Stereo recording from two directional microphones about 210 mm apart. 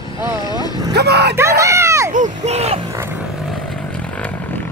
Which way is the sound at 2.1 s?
35° right (ahead or behind).